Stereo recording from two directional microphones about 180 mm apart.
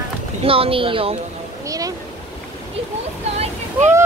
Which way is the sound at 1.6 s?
20° right (ahead or behind).